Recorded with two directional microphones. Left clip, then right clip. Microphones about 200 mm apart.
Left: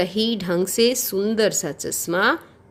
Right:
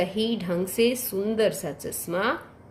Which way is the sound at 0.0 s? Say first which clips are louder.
Left 4 dB; 55° left (ahead or behind).